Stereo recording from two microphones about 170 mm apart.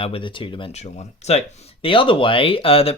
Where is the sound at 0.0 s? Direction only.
30° left (ahead or behind).